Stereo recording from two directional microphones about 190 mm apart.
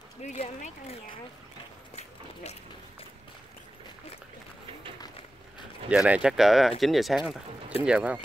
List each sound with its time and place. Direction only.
0.2 s speech: 35° left (ahead or behind)
5.9 s speech: 5° right (ahead or behind)